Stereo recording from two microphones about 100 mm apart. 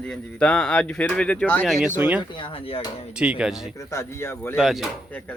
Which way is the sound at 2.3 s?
60° left (ahead or behind).